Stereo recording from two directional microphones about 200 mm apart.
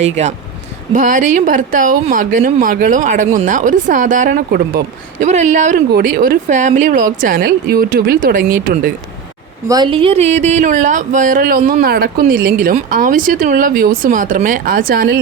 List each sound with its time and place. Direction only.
0.0 s speech: 35° right (ahead or behind)
5.2 s speech: 35° right (ahead or behind)
9.6 s speech: 20° right (ahead or behind); by 15.2 s 45° right (ahead or behind)